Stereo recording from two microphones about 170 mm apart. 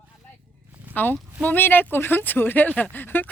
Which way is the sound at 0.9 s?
10° left (ahead or behind).